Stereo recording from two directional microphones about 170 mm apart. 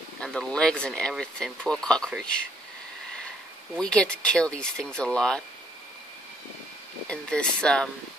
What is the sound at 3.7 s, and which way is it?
Speech, 5° left (ahead or behind).